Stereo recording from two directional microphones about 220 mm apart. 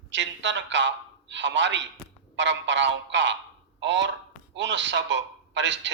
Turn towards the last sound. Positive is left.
turn(degrees=-55)  # may be behind; listen again after turning